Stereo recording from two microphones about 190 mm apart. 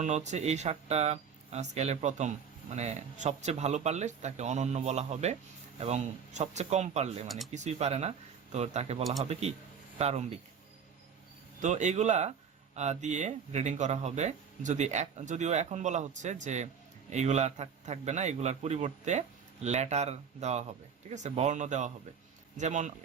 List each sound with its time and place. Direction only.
0.0 s speech: 40° right (ahead or behind)
11.6 s speech: 40° right (ahead or behind)